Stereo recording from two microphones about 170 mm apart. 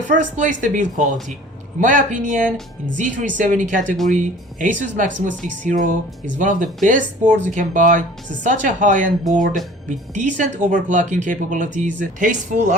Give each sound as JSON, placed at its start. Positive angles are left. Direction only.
{"t": 0.1, "sound": "speech", "side_deg": -50}